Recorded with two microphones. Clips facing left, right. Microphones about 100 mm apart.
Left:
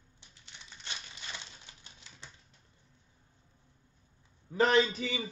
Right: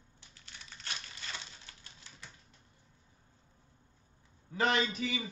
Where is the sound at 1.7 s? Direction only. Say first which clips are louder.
Even; 20° left (ahead or behind).